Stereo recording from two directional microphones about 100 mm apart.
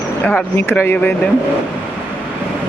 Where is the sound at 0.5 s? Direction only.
20° left (ahead or behind).